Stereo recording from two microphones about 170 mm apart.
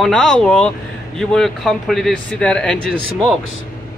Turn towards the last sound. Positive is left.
turn(degrees=0)  # may be behind; listen again after turning